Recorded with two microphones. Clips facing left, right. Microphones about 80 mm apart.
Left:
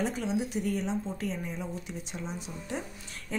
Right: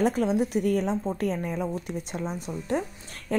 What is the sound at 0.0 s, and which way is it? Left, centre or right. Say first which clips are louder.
Speech: right 7 dB; right.